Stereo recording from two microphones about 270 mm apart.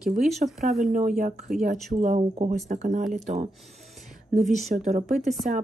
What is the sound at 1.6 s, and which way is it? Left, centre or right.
Speech, right.